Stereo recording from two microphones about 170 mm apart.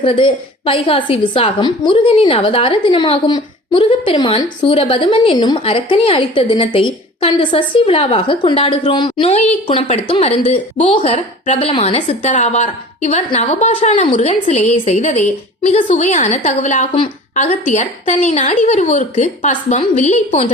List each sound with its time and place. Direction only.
0.0 s a woman's voice: 30° left (ahead or behind)